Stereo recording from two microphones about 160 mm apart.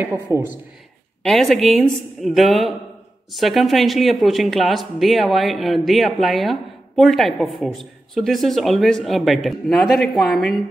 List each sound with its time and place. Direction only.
0.0 s speech: 15° right (ahead or behind)
1.2 s speech: centre (ahead or behind)